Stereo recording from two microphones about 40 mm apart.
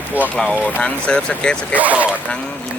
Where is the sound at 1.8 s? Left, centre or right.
Right.